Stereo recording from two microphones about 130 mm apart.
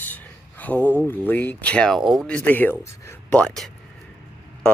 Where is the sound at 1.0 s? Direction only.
15° left (ahead or behind).